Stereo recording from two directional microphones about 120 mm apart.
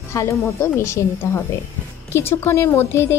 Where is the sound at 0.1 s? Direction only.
25° left (ahead or behind).